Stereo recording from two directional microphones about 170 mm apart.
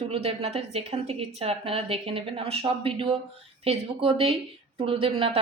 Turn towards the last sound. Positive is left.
turn(degrees=-35)  # may be behind; listen again after turning